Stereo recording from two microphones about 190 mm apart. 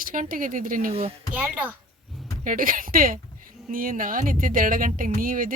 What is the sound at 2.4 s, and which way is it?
Speech, 45° right (ahead or behind).